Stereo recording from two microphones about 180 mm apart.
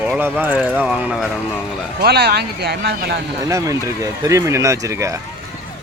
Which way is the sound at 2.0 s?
60° right (ahead or behind).